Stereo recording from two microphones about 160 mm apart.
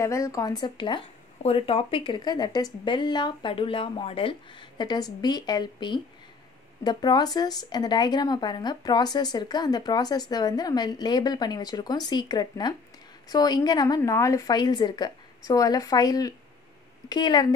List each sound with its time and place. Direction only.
0.0 s speech: 20° left (ahead or behind)